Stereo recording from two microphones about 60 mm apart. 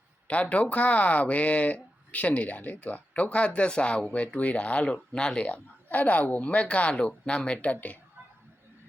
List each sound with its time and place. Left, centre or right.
0.3 s speech: left